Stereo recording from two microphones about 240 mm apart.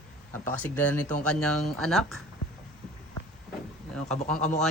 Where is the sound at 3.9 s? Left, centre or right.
Centre.